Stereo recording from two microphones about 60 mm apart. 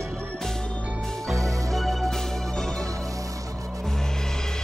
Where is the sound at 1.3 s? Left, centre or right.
Right.